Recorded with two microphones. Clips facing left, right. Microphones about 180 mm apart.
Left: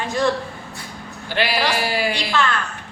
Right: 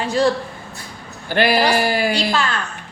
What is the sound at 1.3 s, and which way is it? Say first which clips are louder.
Speech: right 5 dB; 45° right (ahead or behind).